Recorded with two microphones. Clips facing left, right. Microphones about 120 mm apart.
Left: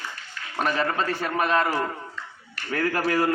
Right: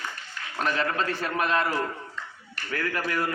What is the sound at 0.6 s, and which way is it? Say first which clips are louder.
A man's voice: left 2 dB; 10° left (ahead or behind).